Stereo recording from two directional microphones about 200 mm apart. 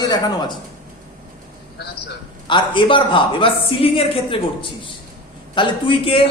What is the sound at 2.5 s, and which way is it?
Speech, 25° left (ahead or behind).